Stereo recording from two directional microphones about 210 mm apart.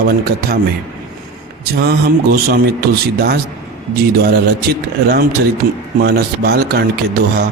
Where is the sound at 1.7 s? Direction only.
45° right (ahead or behind).